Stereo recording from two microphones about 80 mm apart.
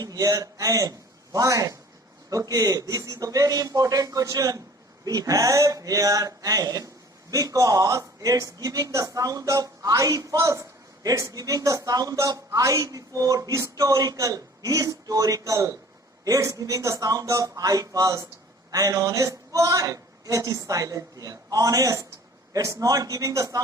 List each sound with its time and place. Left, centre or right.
0.0 s a man's voice: right